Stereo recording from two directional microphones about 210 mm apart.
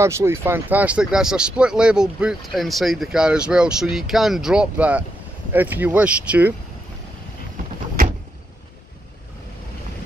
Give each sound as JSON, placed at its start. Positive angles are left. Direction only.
{"t": 0.0, "sound": "speech", "side_deg": -10}